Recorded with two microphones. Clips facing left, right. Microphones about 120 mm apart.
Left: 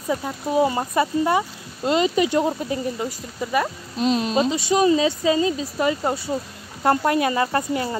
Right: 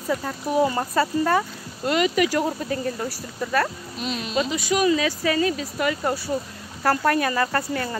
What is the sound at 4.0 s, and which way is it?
A woman's voice, 35° left (ahead or behind).